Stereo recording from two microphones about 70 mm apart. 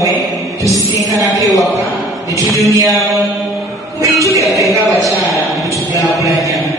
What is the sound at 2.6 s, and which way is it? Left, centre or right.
Mantra, right.